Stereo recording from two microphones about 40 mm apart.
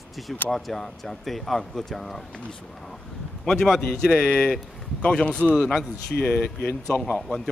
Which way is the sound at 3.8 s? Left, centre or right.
Centre.